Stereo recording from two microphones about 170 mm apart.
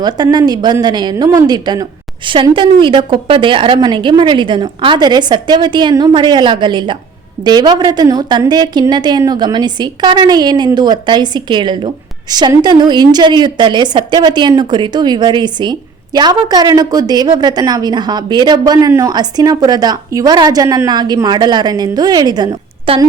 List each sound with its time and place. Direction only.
0.0 s a woman's voice: 25° right (ahead or behind)